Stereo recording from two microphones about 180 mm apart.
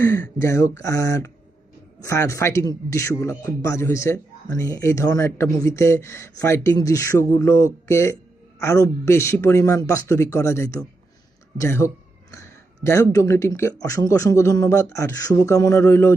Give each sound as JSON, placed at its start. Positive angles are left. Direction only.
{"t": 0.0, "sound": "a man's voice", "side_deg": 15}